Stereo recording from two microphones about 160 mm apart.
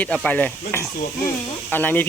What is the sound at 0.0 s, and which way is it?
Speech, 10° left (ahead or behind).